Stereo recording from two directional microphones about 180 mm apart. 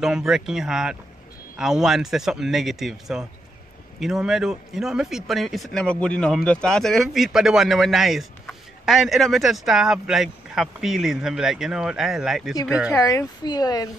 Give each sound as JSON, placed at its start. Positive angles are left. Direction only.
{"t": 0.0, "sound": "speech", "side_deg": -5}
{"t": 13.0, "sound": "speech", "side_deg": 20}